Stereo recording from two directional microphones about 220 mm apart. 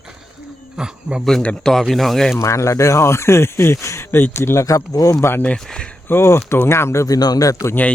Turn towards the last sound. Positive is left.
turn(degrees=10)  # may be behind; listen again after turning